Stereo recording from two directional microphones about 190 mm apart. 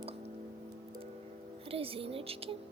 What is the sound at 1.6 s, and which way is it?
Speech, 30° right (ahead or behind).